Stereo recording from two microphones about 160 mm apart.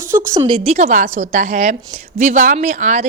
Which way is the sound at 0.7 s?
50° right (ahead or behind).